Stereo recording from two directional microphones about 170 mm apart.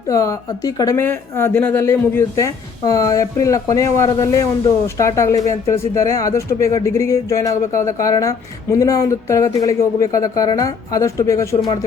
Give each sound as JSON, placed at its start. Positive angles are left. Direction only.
{"t": 0.1, "sound": "a woman's voice", "side_deg": 20}
{"t": 11.5, "sound": "a woman's voice", "side_deg": 30}